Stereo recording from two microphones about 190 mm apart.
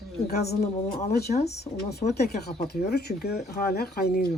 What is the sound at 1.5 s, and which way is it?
Speech, 60° left (ahead or behind).